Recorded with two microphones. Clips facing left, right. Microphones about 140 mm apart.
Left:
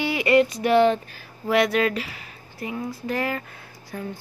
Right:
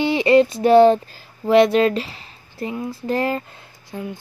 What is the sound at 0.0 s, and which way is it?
Speech, 25° right (ahead or behind).